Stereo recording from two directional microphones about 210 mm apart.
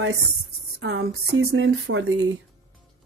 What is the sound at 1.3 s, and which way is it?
Speech, 60° right (ahead or behind).